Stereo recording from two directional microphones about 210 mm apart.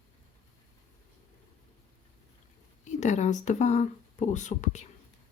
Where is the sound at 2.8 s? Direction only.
35° left (ahead or behind).